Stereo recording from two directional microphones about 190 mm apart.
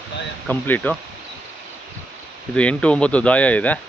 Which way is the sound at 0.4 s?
10° left (ahead or behind).